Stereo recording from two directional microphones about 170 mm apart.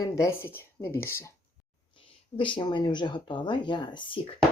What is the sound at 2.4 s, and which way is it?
Speech, 30° left (ahead or behind).